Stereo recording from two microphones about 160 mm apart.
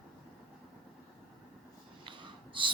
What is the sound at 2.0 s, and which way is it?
Snort, 30° right (ahead or behind).